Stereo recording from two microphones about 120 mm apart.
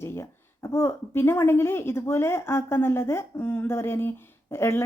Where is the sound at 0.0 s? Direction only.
20° left (ahead or behind).